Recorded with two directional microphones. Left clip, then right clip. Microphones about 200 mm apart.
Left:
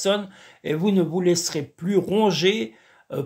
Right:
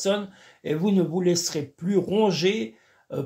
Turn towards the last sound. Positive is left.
turn(degrees=25)  # may be behind; listen again after turning